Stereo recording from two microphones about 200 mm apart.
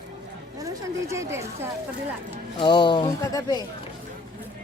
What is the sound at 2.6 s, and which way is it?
Speech, 25° left (ahead or behind).